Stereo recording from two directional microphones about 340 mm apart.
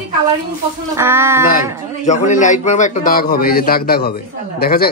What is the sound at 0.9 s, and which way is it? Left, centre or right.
Speech, centre.